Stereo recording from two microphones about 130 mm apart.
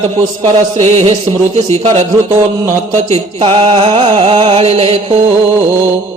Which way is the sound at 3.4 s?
40° right (ahead or behind).